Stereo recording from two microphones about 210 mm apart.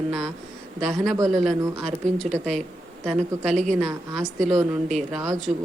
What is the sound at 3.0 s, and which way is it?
Speech, centre (ahead or behind).